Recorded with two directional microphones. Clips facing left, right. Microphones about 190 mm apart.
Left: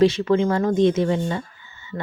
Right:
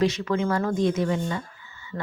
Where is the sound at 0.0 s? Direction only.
30° left (ahead or behind).